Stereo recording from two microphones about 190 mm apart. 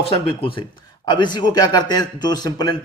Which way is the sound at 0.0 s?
25° left (ahead or behind).